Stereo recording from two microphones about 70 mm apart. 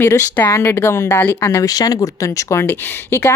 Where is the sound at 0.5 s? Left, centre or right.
Left.